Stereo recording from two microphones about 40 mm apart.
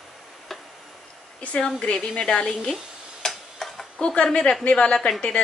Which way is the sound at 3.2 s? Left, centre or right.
Centre.